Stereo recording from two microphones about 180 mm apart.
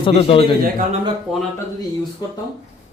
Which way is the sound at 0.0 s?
30° left (ahead or behind).